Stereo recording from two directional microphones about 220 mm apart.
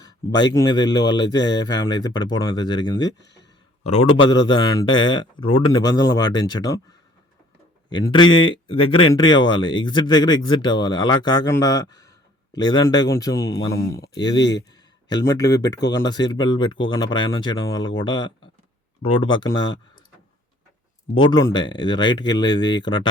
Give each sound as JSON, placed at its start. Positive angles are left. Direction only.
{"t": 0.0, "sound": "speech", "side_deg": 20}
{"t": 7.9, "sound": "speech", "side_deg": 20}
{"t": 21.2, "sound": "speech", "side_deg": 20}